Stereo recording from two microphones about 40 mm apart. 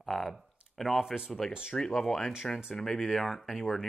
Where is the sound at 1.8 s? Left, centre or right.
Centre.